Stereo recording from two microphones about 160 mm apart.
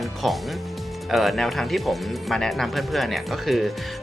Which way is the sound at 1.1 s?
Centre (ahead or behind).